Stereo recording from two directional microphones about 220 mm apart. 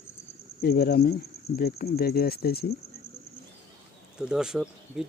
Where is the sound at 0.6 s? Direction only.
45° left (ahead or behind).